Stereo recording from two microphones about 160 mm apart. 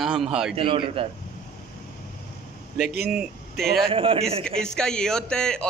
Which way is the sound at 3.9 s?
35° right (ahead or behind).